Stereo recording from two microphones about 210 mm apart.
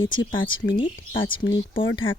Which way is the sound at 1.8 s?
65° left (ahead or behind).